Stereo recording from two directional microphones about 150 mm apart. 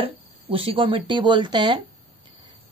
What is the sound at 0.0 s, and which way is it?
Speech, 40° right (ahead or behind).